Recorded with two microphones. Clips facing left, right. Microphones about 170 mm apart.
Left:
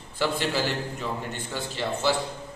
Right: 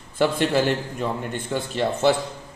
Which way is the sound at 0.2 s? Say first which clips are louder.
Right 6 dB; 50° right (ahead or behind).